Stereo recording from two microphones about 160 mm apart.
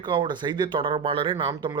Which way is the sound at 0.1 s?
30° right (ahead or behind).